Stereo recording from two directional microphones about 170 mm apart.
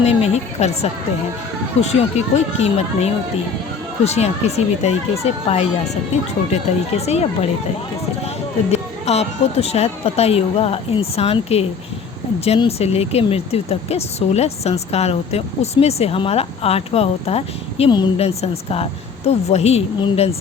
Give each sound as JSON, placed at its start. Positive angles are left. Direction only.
{"t": 0.0, "sound": "speech", "side_deg": 40}
{"t": 8.7, "sound": "speech", "side_deg": 40}